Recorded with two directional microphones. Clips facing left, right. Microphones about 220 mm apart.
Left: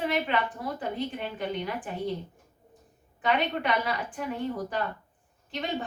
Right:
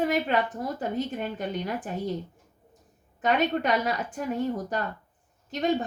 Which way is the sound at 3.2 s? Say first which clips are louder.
Right 3 dB; 45° right (ahead or behind).